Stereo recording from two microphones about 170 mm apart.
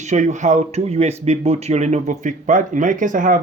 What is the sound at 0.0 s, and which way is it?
Speech, 45° right (ahead or behind).